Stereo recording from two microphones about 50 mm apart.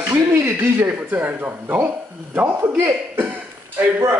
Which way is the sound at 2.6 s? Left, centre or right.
Right.